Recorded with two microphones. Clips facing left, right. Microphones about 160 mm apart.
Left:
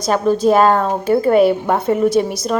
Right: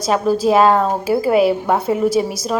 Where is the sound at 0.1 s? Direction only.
5° right (ahead or behind).